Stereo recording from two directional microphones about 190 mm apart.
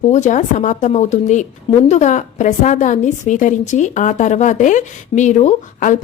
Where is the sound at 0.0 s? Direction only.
40° left (ahead or behind).